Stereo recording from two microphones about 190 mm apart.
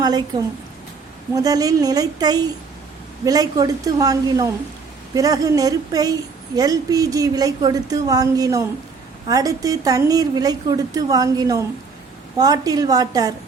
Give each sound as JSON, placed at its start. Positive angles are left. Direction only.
{"t": 0.0, "sound": "a woman's voice", "side_deg": -20}